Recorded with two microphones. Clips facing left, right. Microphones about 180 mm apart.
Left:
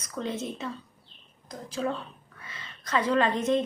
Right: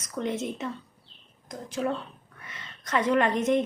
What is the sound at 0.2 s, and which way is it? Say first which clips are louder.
Speech: right 2 dB; 20° right (ahead or behind).